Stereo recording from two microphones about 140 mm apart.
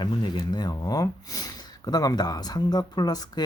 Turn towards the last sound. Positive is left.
turn(degrees=30)  # may be behind; listen again after turning